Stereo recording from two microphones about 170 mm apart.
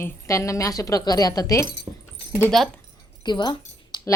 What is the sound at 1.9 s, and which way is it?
Dog, 30° right (ahead or behind).